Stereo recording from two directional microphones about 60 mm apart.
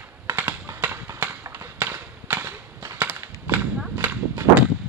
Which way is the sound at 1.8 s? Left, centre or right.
Right.